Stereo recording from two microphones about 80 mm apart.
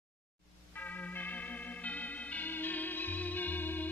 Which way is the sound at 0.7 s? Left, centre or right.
Left.